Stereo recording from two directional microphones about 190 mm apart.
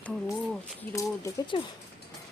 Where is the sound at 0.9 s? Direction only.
15° left (ahead or behind).